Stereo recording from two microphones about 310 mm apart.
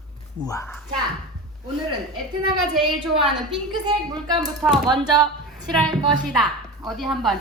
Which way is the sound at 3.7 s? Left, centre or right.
Centre.